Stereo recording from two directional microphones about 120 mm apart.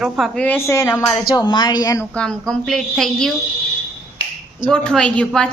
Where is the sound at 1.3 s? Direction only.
35° left (ahead or behind).